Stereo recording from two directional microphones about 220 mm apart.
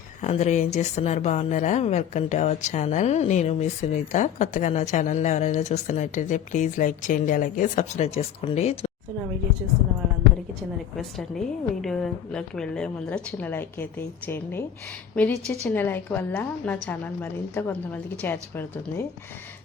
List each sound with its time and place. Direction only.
0.2 s speech: 30° left (ahead or behind)
10.9 s a woman's voice: centre (ahead or behind)